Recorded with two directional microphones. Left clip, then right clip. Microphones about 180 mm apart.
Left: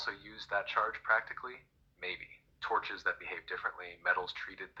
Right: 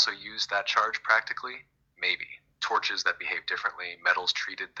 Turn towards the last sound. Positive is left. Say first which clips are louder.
# right 9 dB
turn(degrees=-20)  # may be behind; listen again after turning